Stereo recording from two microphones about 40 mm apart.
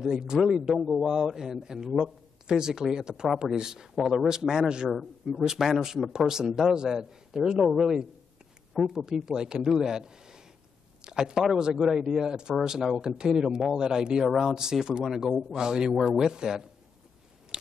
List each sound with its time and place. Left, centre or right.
0.0 s a man's voice: centre